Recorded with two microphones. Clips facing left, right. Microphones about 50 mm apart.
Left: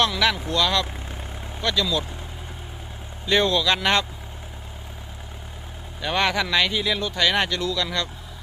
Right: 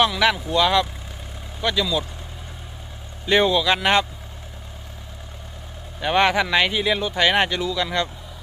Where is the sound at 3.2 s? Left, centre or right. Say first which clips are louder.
Right 2 dB; centre.